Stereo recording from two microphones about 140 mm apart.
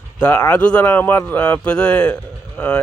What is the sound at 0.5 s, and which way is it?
Speech, 10° left (ahead or behind).